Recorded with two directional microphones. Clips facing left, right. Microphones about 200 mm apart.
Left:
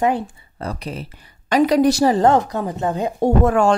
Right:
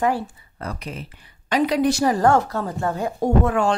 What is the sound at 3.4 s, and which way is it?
Speech, 45° left (ahead or behind).